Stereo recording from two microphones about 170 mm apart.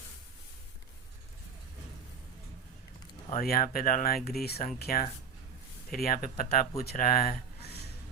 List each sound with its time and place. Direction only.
3.2 s speech: 55° left (ahead or behind)